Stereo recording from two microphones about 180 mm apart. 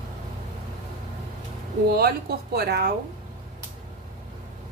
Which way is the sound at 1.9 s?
60° right (ahead or behind).